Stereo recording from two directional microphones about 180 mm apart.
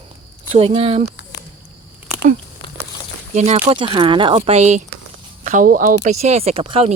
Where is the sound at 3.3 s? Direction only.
35° right (ahead or behind).